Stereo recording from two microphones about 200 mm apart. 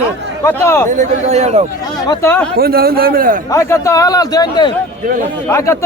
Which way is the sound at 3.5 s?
15° left (ahead or behind).